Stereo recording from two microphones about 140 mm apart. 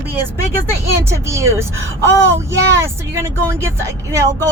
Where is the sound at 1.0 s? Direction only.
20° right (ahead or behind).